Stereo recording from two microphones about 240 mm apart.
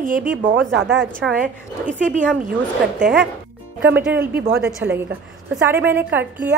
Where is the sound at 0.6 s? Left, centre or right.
Right.